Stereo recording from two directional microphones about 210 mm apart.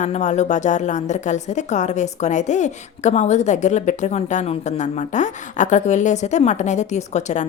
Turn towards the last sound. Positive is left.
turn(degrees=35)  # may be behind; listen again after turning